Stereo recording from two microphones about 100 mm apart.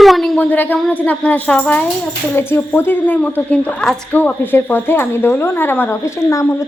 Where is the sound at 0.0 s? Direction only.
Centre (ahead or behind).